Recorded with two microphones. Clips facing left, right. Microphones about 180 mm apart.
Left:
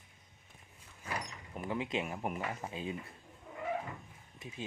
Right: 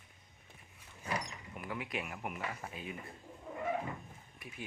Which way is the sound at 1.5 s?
25° left (ahead or behind).